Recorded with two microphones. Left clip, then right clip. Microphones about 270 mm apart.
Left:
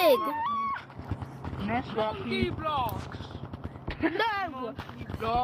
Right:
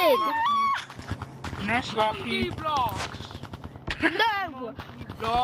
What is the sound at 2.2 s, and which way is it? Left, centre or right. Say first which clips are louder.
Speech: right 2 dB; centre.